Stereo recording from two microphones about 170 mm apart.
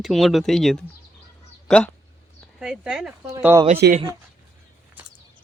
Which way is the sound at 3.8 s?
75° right (ahead or behind).